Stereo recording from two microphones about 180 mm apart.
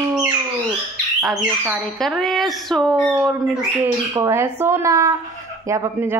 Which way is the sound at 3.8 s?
15° right (ahead or behind).